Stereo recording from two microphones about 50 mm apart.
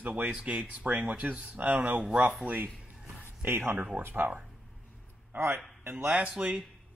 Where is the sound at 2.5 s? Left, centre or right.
Right.